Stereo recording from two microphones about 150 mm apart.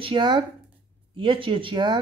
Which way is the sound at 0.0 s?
30° right (ahead or behind).